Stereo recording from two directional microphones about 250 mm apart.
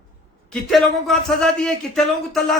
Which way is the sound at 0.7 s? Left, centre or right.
Centre.